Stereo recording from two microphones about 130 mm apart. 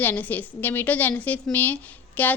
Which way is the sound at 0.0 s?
15° left (ahead or behind).